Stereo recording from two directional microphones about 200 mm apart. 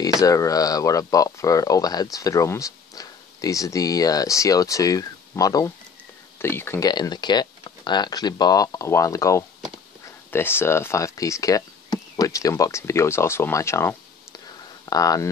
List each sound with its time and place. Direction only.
0.2 s speech: 15° left (ahead or behind)